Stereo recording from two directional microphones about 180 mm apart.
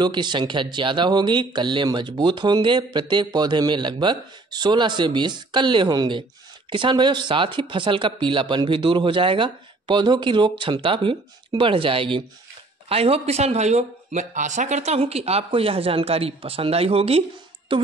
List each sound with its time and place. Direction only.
0.0 s speech: 25° right (ahead or behind)